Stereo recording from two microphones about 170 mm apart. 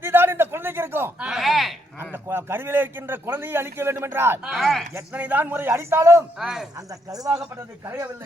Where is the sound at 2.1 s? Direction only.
15° right (ahead or behind).